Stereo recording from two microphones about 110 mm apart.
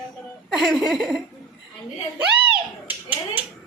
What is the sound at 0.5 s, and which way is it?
Speech, centre (ahead or behind).